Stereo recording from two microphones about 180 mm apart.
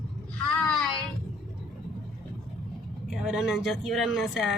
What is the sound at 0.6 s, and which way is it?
Speech, 5° left (ahead or behind).